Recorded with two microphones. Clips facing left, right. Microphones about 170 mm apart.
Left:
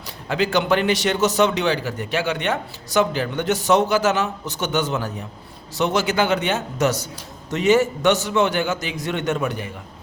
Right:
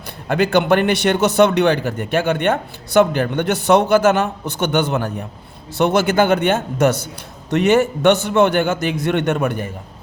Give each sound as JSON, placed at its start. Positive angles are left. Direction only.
{"t": 0.3, "sound": "a man's voice", "side_deg": -55}